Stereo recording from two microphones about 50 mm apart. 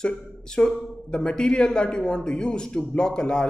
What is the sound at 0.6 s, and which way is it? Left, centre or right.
A man's voice, left.